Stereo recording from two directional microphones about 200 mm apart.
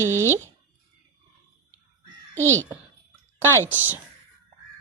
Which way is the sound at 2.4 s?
15° right (ahead or behind).